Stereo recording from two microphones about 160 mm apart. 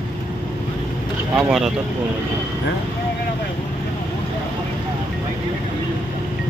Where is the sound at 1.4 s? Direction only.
5° right (ahead or behind).